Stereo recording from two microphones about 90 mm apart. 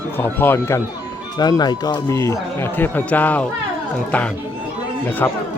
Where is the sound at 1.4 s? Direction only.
50° left (ahead or behind).